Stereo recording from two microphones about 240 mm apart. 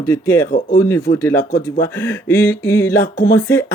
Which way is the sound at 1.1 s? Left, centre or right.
Left.